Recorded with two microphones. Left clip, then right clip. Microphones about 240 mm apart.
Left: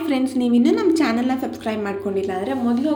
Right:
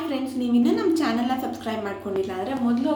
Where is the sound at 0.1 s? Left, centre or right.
Left.